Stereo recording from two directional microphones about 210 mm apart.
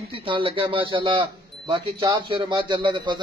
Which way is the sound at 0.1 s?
25° right (ahead or behind).